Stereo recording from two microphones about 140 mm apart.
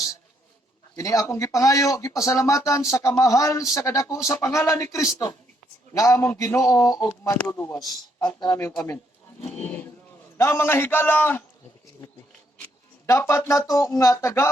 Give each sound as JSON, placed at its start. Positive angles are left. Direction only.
{"t": 0.9, "sound": "speech", "side_deg": 25}
{"t": 9.6, "sound": "a man's voice", "side_deg": 10}
{"t": 13.1, "sound": "speech", "side_deg": 20}